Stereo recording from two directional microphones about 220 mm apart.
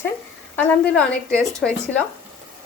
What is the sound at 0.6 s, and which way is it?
A woman's voice, 5° left (ahead or behind).